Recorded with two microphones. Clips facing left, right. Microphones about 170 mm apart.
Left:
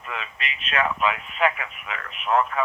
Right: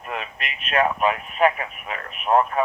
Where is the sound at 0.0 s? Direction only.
50° right (ahead or behind).